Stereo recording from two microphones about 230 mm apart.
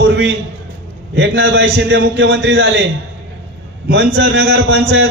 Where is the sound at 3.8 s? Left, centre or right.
Right.